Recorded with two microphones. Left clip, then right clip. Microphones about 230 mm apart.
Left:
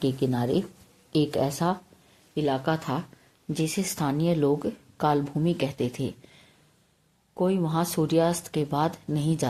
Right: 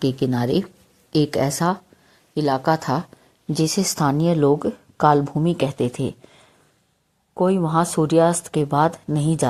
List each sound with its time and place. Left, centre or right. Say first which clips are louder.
0.0 s speech: right 5 dB; right
6.1 s a sound: right 6 dB; right
7.3 s speech: right 7 dB; right